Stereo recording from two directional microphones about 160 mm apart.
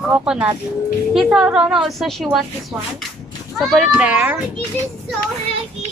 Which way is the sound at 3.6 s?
Centre (ahead or behind).